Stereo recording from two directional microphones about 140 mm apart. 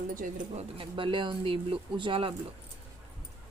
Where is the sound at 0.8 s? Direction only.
40° right (ahead or behind).